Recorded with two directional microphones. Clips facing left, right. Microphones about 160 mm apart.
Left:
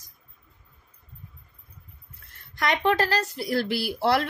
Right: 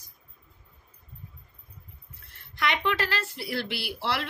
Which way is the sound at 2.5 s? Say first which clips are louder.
Left 5 dB; 45° left (ahead or behind).